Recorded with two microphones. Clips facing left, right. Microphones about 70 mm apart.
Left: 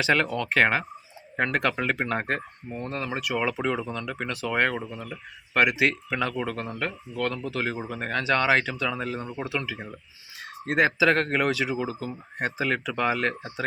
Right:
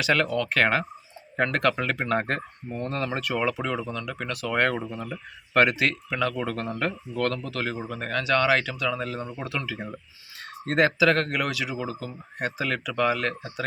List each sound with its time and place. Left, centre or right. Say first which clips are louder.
0.0 s speech: even; left
4.5 s speech: right 1 dB; centre
4.8 s speech: right 2 dB; centre
5.8 s speech: left 1 dB; left
6.4 s speech: right 2 dB; centre
7.4 s speech: left 1 dB; left